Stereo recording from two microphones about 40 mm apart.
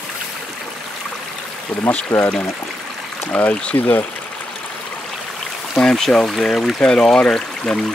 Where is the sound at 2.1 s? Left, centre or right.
Left.